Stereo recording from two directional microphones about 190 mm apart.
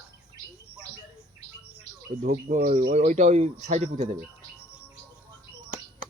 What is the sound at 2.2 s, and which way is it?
Speech, 40° right (ahead or behind).